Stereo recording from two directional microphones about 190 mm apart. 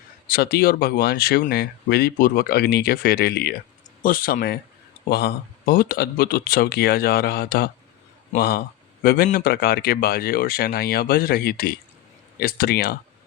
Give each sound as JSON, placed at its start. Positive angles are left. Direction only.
{"t": 0.3, "sound": "a man's voice", "side_deg": 55}